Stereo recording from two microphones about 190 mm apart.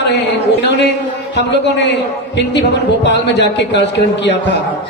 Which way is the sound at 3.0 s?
65° left (ahead or behind).